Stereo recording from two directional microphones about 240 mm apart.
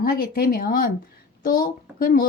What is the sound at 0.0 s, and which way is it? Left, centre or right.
Speech, left.